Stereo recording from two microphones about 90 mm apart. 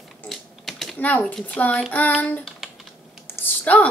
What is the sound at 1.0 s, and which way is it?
Speech, 15° left (ahead or behind).